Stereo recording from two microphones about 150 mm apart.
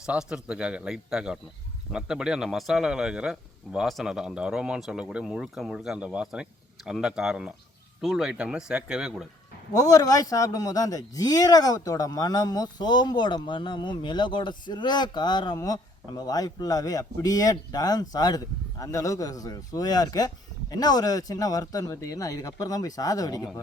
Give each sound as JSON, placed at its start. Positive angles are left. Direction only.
{"t": 0.0, "sound": "speech", "side_deg": -5}
{"t": 9.7, "sound": "a man's voice", "side_deg": 25}